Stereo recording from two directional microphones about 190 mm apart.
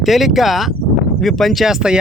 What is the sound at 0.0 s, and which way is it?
Speech, centre (ahead or behind).